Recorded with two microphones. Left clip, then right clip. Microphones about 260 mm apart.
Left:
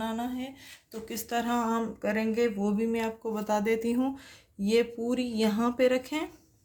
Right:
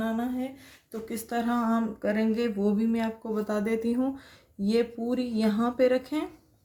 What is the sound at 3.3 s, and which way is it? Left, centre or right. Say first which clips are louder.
Speech: left 1 dB; left.